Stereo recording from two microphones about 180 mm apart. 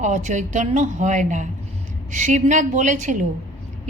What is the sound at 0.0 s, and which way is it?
A woman's voice, 40° right (ahead or behind).